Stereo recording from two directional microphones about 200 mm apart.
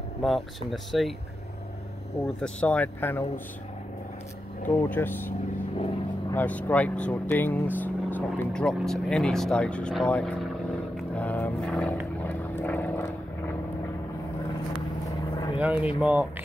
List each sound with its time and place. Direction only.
0.2 s speech: centre (ahead or behind)
2.2 s speech: 5° left (ahead or behind)
4.6 s speech: 10° left (ahead or behind)
6.3 s speech: 5° left (ahead or behind)
11.0 s vehicle: 10° left (ahead or behind)
15.3 s vehicle: 20° left (ahead or behind)
15.6 s speech: 5° right (ahead or behind)